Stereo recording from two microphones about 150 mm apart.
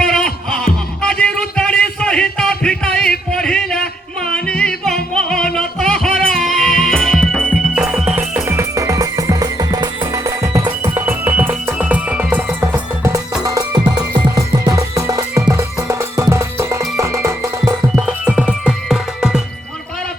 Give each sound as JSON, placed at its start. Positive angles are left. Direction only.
{"t": 0.0, "sound": "music", "side_deg": 5}
{"t": 1.0, "sound": "a sound", "side_deg": 5}
{"t": 4.4, "sound": "music", "side_deg": 5}